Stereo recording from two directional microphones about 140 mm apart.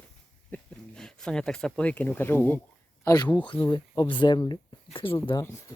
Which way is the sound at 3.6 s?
30° left (ahead or behind).